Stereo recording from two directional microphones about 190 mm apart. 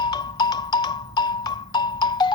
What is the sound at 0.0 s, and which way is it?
Music, 20° left (ahead or behind).